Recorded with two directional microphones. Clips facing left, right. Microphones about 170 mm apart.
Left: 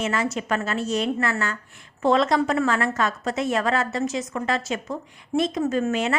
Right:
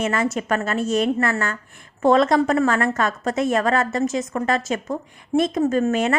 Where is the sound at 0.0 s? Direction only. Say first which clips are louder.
Right 3 dB; 50° right (ahead or behind).